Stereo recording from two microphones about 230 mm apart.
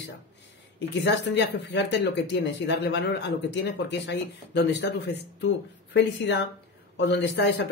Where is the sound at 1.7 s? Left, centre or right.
Left.